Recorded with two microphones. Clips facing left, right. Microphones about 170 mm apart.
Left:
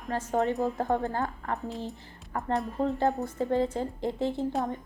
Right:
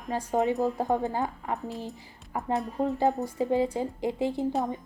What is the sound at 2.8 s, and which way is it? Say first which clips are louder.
Speech: right 2 dB; 10° right (ahead or behind).